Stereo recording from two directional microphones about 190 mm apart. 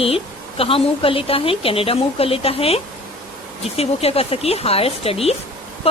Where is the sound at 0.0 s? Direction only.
30° left (ahead or behind).